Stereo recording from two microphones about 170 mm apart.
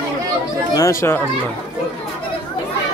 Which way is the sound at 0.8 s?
20° left (ahead or behind).